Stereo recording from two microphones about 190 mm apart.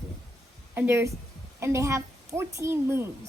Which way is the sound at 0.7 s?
10° right (ahead or behind).